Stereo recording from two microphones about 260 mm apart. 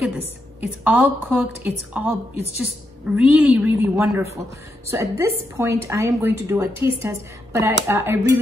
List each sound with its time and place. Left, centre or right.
0.0 s a woman's voice: centre
3.2 s a woman's voice: centre